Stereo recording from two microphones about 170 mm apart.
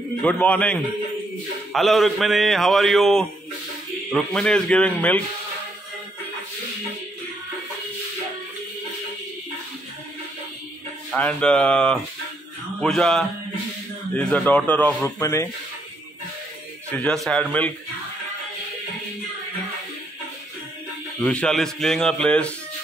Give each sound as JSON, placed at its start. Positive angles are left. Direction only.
{"t": 0.2, "sound": "a man's voice", "side_deg": 10}
{"t": 11.1, "sound": "a man's voice", "side_deg": 5}
{"t": 16.9, "sound": "a man's voice", "side_deg": 5}
{"t": 21.2, "sound": "a man's voice", "side_deg": 5}